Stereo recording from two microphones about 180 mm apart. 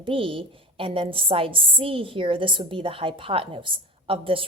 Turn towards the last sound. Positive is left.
turn(degrees=-30)  # may be behind; listen again after turning